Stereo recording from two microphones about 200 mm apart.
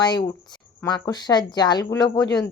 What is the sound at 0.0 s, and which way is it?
Speech, 20° left (ahead or behind).